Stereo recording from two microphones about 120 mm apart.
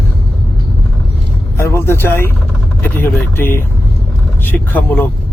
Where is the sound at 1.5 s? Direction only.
20° left (ahead or behind).